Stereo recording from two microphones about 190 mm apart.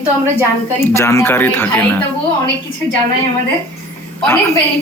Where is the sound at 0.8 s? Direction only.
15° left (ahead or behind).